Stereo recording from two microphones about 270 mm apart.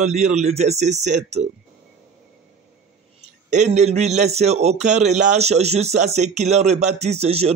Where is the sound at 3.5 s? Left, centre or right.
Right.